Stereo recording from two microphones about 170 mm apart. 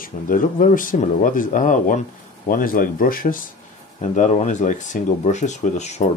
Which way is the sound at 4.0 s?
45° left (ahead or behind).